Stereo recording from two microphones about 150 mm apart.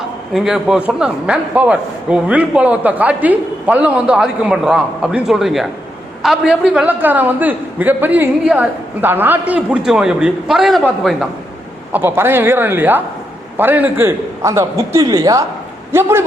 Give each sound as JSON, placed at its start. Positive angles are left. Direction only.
{"t": 0.3, "sound": "a man's voice", "side_deg": -5}
{"t": 11.9, "sound": "a man's voice", "side_deg": -15}